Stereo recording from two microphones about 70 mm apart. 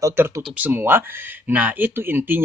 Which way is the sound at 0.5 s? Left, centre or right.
Right.